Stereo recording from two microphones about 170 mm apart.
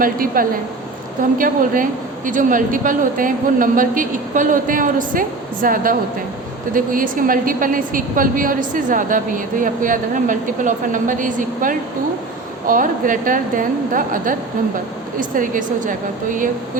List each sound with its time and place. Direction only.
0.0 s a woman's voice: 55° right (ahead or behind)